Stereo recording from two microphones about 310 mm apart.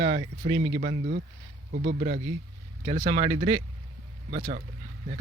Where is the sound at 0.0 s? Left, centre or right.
Right.